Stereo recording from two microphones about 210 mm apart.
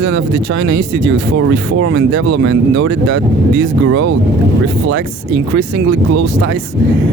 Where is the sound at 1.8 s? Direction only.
60° right (ahead or behind).